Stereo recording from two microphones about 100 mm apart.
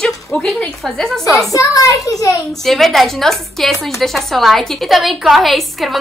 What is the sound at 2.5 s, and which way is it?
A woman's voice, 5° left (ahead or behind).